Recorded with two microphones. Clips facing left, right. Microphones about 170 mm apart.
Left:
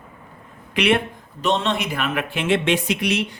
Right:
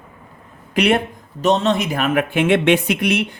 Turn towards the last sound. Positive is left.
turn(degrees=-55)  # may be behind; listen again after turning